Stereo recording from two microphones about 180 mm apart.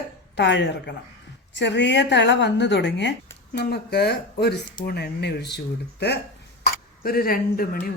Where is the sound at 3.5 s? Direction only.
65° left (ahead or behind).